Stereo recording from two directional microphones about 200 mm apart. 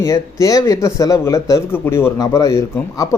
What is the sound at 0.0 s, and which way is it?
Speech, 15° left (ahead or behind).